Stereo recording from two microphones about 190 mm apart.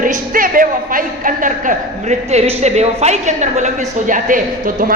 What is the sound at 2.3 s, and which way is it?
A woman's voice, 35° right (ahead or behind).